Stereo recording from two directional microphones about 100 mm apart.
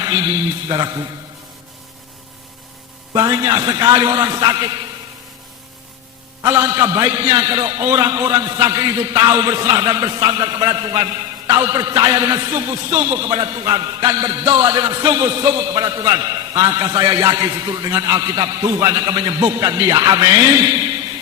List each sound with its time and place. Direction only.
0.0 s a sound: 35° right (ahead or behind)
0.7 s a man's voice: 40° right (ahead or behind)
3.1 s a man's voice: 40° right (ahead or behind)
6.4 s a man's voice: 30° right (ahead or behind)